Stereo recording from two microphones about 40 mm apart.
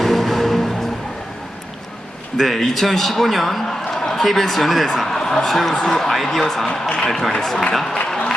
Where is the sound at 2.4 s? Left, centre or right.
Centre.